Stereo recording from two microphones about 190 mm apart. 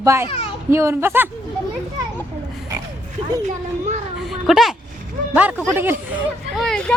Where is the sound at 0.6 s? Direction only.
15° right (ahead or behind).